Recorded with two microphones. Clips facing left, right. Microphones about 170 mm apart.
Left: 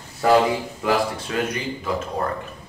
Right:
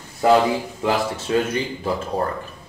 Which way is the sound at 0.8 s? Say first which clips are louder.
Even; 25° right (ahead or behind).